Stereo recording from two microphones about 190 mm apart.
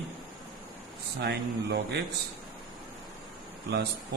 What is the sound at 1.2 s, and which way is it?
Speech, 60° right (ahead or behind).